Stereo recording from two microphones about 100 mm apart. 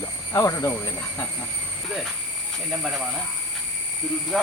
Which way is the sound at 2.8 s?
Centre (ahead or behind).